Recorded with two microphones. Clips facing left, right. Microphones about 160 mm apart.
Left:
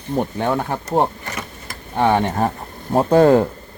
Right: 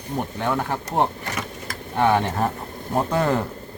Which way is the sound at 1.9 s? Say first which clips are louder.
Left 3 dB; 30° left (ahead or behind).